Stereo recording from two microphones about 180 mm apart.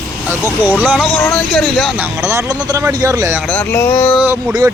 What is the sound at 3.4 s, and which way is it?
Speech, 5° left (ahead or behind).